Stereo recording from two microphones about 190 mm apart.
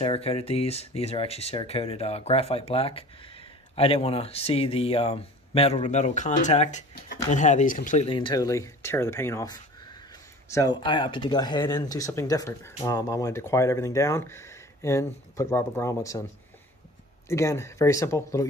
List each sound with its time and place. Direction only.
0.0 s speech: 30° left (ahead or behind)
8.1 s speech: 25° left (ahead or behind)
17.3 s speech: 15° left (ahead or behind)